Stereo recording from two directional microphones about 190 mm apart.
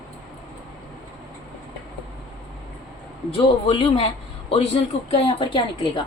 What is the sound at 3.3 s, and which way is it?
A man's voice, 30° left (ahead or behind).